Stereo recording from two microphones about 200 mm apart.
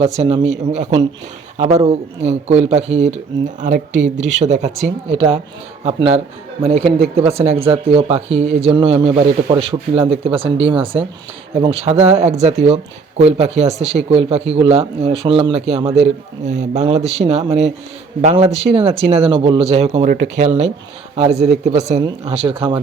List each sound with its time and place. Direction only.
0.2 s speech: 30° right (ahead or behind)
11.5 s speech: 30° right (ahead or behind)